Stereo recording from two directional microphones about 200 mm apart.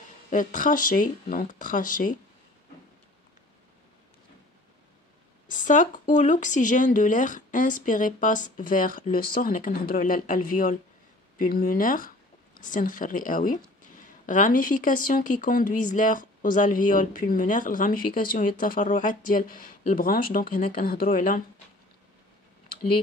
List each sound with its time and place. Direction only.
0.3 s speech: 40° left (ahead or behind)
5.5 s speech: 40° left (ahead or behind)